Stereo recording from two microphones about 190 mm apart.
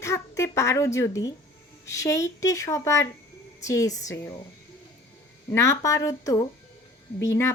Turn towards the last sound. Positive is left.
turn(degrees=15)  # may be behind; listen again after turning